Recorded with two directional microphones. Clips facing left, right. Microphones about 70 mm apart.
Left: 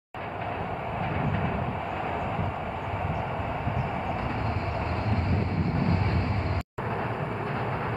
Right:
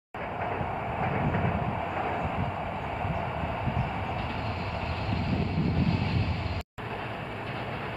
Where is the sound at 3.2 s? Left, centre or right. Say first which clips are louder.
Left 1 dB; centre.